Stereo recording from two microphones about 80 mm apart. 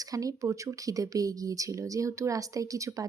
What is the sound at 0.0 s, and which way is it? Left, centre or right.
Speech, right.